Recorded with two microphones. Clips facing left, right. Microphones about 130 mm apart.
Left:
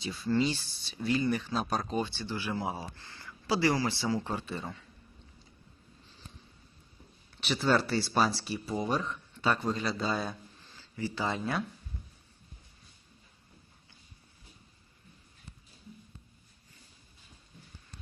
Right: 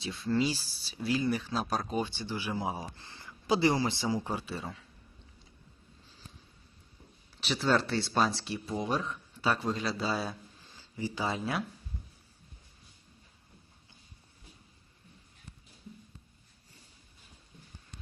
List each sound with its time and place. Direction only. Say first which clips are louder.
0.0 s speech: left 1 dB; centre (ahead or behind)
4.5 s speech: left 1 dB; centre (ahead or behind)
7.3 s speech: left 1 dB; centre (ahead or behind)
10.7 s a sound: even; 15° right (ahead or behind)
11.3 s speech: left 1 dB; 5° right (ahead or behind)